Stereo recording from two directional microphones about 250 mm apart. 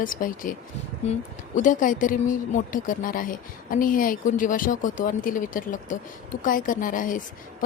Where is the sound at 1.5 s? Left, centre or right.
Left.